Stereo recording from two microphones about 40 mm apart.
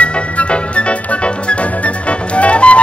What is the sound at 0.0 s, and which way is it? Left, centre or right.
Music, left.